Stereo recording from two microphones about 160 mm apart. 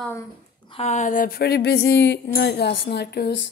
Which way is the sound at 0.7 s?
45° left (ahead or behind).